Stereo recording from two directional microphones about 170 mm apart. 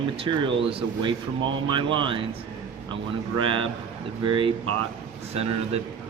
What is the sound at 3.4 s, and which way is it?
A man's voice, 30° right (ahead or behind).